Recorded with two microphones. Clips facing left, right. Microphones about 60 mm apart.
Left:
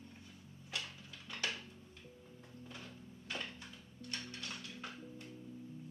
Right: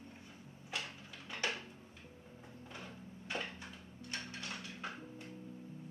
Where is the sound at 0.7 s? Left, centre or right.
Centre.